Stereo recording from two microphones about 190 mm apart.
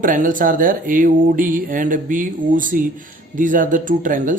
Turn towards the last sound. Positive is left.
turn(degrees=-45)  # may be behind; listen again after turning